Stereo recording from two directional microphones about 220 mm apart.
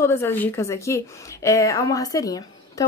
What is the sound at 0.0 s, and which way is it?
A woman's voice, 10° left (ahead or behind).